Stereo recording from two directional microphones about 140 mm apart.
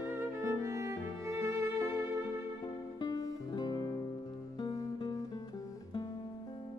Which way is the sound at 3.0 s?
25° left (ahead or behind).